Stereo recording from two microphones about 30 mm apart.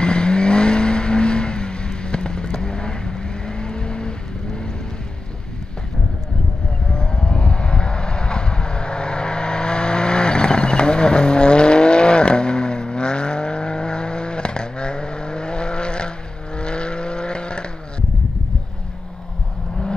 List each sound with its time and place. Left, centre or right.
0.0 s vehicle: left
6.9 s vehicle: left